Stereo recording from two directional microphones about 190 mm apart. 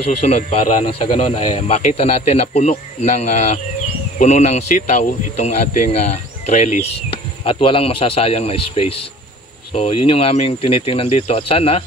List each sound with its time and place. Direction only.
0.2 s speech: 35° left (ahead or behind)